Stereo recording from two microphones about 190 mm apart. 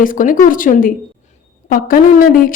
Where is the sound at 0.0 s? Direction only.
45° left (ahead or behind).